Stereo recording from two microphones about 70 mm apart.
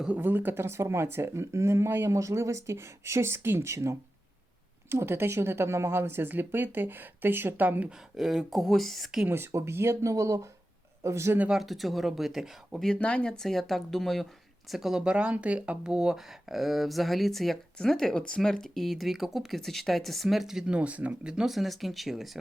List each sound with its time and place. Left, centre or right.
0.2 s speech: right
7.9 s speech: centre
9.3 s speech: right
11.5 s speech: centre
13.0 s speech: centre
20.7 s speech: centre
21.3 s speech: centre